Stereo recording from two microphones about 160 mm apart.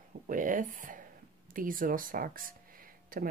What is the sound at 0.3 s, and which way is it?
Speech, 55° right (ahead or behind).